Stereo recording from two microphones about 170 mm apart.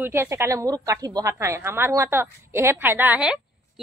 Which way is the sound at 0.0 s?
15° right (ahead or behind).